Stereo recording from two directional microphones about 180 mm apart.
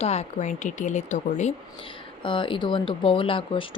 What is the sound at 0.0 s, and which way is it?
A woman's voice, 35° left (ahead or behind).